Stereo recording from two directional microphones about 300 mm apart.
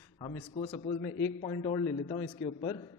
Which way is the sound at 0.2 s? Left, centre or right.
Centre.